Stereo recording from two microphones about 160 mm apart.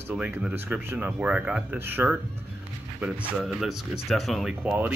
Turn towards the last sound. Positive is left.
turn(degrees=0)  # may be behind; listen again after turning